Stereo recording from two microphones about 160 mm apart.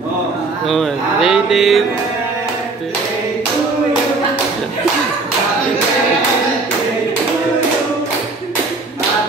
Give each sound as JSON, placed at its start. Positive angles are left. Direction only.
{"t": 0.7, "sound": "mantra", "side_deg": 0}